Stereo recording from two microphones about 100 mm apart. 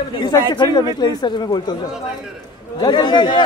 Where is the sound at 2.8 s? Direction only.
45° left (ahead or behind).